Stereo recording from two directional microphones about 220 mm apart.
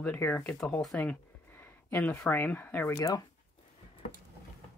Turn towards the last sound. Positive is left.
turn(degrees=15)  # may be behind; listen again after turning